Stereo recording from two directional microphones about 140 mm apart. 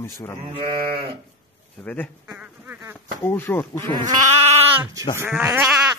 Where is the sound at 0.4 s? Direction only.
40° right (ahead or behind).